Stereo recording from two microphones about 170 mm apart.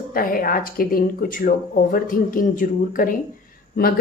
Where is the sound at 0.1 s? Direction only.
55° left (ahead or behind).